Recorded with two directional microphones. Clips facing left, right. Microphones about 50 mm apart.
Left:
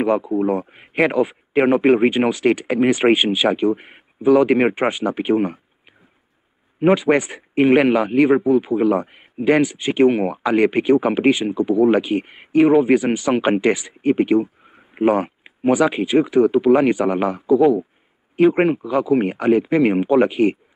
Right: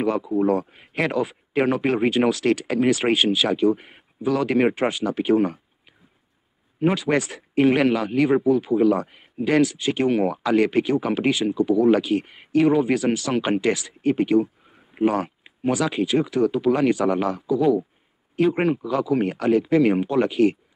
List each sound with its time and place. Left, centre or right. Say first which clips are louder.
0.0 s a man's voice: left 3 dB; centre